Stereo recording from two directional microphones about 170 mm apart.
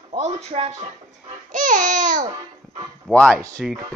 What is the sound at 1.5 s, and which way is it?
Babbling, 50° right (ahead or behind).